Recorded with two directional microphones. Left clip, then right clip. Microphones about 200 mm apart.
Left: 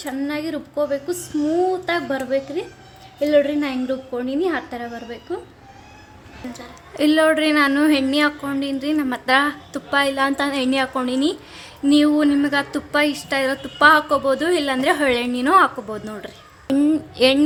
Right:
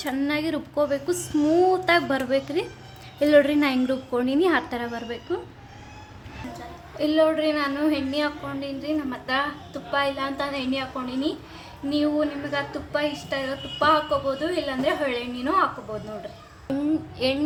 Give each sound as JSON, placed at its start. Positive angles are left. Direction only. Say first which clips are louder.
{"t": 0.0, "sound": "a woman's voice", "louder": "even", "side_deg": 0}
{"t": 7.0, "sound": "speech", "louder": "left 5 dB", "side_deg": 50}
{"t": 16.6, "sound": "a sound", "louder": "left 7 dB", "side_deg": 35}